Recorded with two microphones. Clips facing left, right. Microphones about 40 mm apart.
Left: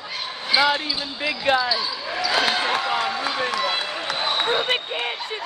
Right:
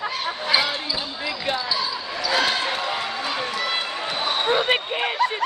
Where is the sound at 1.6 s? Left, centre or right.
Centre.